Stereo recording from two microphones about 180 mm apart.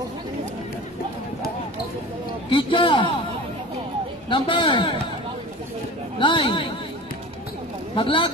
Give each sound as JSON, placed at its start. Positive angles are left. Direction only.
{"t": 2.5, "sound": "a man's voice", "side_deg": 30}
{"t": 4.3, "sound": "a man's voice", "side_deg": 30}
{"t": 6.1, "sound": "a sound", "side_deg": 30}
{"t": 7.9, "sound": "a man's voice", "side_deg": 30}